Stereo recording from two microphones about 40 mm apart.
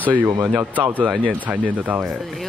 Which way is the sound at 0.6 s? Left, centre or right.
Right.